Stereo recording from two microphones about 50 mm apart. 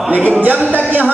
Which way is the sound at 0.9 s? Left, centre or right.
Right.